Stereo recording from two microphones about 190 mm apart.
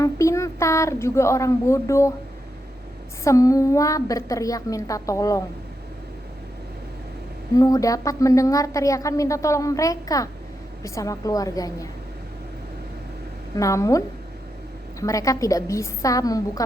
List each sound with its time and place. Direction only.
0.0 s speech: 15° left (ahead or behind)
3.2 s a woman's voice: 15° left (ahead or behind)
7.5 s a woman's voice: 15° left (ahead or behind)
13.6 s a woman's voice: 15° left (ahead or behind)
15.0 s a woman's voice: 15° left (ahead or behind)